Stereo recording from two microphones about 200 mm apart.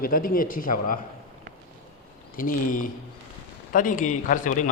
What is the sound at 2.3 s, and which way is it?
A man's voice, 45° left (ahead or behind).